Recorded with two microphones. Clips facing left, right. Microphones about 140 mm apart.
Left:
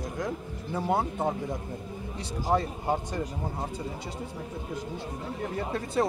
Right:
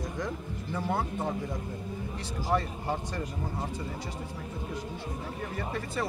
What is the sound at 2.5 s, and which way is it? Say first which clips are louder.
Speech: left 3 dB; 20° left (ahead or behind).